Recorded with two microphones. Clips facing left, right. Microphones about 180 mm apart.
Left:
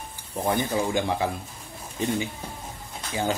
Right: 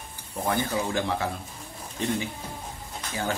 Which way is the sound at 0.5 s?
15° left (ahead or behind).